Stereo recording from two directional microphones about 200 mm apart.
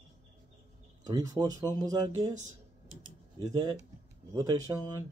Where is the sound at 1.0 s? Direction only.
20° right (ahead or behind).